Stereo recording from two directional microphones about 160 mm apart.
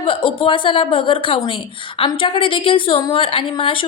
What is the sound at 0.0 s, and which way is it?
A woman's voice, 35° left (ahead or behind).